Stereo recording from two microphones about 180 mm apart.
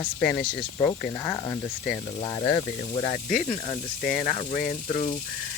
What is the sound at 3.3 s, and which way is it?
Speech, 45° left (ahead or behind).